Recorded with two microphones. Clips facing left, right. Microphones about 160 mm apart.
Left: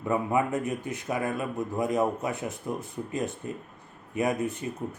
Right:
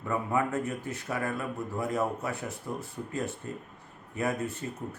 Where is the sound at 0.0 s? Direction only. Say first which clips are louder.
Left 3 dB; 15° left (ahead or behind).